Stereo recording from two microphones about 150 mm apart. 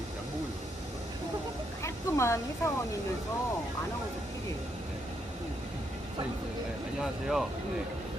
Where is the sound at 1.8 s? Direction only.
20° left (ahead or behind).